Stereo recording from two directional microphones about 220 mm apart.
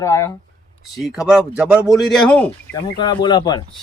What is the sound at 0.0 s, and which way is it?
Speech, 15° left (ahead or behind).